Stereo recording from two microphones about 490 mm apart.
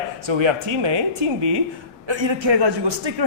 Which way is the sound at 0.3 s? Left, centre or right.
Right.